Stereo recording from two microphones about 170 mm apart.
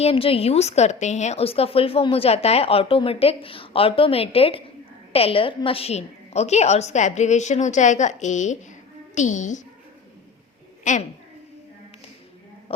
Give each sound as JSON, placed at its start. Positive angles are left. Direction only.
{"t": 0.0, "sound": "a woman's voice", "side_deg": 35}
{"t": 10.9, "sound": "a woman's voice", "side_deg": 45}